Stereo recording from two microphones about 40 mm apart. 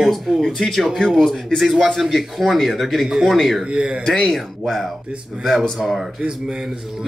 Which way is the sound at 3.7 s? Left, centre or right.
Right.